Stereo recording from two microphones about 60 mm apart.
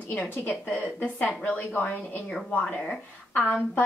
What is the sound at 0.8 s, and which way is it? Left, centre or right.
Speech, left.